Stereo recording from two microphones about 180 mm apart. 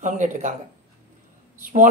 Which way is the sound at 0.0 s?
45° right (ahead or behind).